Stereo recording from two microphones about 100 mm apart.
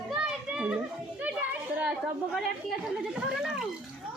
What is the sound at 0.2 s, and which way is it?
Children playing, 10° right (ahead or behind).